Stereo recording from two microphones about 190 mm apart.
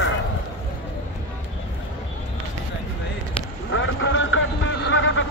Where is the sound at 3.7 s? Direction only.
80° left.